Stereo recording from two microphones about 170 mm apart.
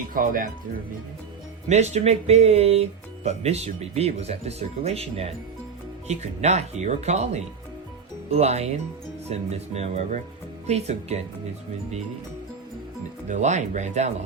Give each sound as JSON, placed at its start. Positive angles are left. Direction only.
{"t": 0.1, "sound": "speech", "side_deg": -55}
{"t": 1.6, "sound": "speech", "side_deg": -40}
{"t": 8.3, "sound": "speech", "side_deg": -40}
{"t": 13.2, "sound": "speech", "side_deg": -45}